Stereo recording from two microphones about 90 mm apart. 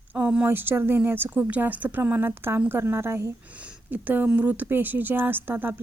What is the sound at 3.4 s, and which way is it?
A woman's voice, 15° right (ahead or behind).